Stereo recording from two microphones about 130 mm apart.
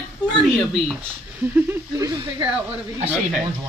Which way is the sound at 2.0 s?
30° right (ahead or behind).